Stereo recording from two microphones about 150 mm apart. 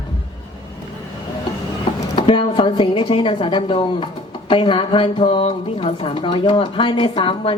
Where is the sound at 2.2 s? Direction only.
35° left (ahead or behind).